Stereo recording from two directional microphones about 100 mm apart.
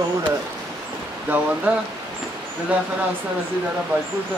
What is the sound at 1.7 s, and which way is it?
Speech, 15° right (ahead or behind).